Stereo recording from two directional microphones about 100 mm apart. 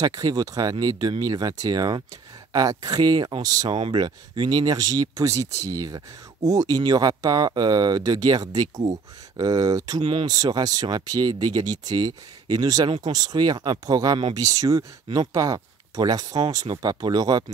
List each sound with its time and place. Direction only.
0.0 s speech: 40° right (ahead or behind)